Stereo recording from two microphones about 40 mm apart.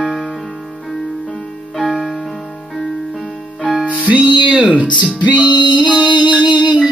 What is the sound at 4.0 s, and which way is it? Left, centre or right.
Music, right.